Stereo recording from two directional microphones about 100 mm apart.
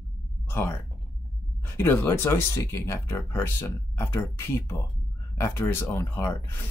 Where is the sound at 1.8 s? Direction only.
25° left (ahead or behind).